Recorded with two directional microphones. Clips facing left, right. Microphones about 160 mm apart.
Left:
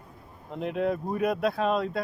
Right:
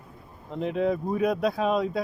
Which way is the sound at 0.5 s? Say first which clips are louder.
Right 2 dB; centre (ahead or behind).